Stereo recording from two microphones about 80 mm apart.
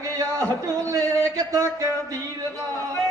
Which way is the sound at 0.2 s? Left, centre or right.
Right.